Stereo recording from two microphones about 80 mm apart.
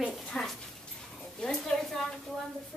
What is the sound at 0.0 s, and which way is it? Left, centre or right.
Dog, centre.